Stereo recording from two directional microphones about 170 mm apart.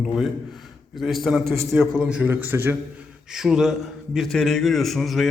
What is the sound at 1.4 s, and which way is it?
Speech, 15° right (ahead or behind).